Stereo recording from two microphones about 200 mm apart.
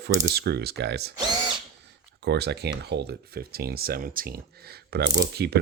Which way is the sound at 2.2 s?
55° right (ahead or behind).